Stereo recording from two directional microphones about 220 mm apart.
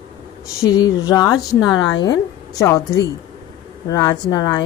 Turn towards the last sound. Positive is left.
turn(degrees=20)  # may be behind; listen again after turning